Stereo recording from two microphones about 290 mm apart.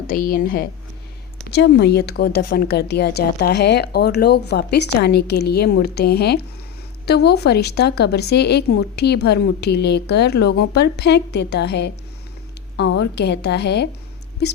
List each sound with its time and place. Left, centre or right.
0.1 s a woman's voice: left